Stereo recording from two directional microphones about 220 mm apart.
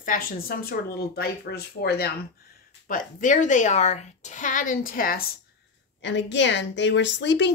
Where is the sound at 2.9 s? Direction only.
35° left (ahead or behind).